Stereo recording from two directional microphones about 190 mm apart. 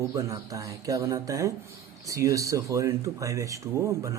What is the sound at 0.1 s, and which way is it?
Speech, 15° right (ahead or behind).